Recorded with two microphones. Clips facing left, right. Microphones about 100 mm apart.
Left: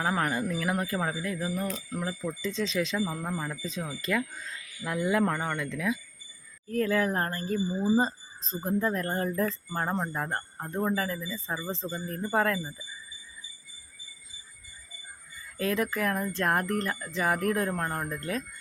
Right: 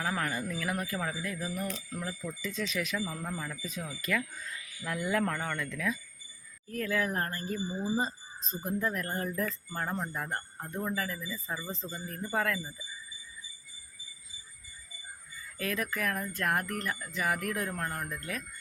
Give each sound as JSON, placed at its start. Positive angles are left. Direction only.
{"t": 0.0, "sound": "speech", "side_deg": 30}
{"t": 6.7, "sound": "speech", "side_deg": 35}
{"t": 15.5, "sound": "speech", "side_deg": 25}